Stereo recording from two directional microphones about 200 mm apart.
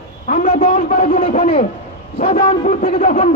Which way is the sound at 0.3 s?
40° left (ahead or behind).